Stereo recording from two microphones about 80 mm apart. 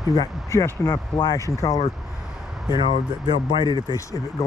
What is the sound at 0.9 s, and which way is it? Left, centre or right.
Speech, left.